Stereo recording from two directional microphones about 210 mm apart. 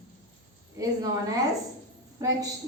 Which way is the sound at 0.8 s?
15° right (ahead or behind).